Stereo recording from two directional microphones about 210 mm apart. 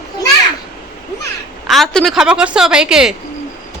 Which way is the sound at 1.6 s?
Centre (ahead or behind).